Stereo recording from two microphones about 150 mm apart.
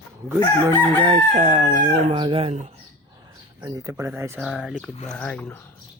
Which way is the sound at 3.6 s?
25° right (ahead or behind).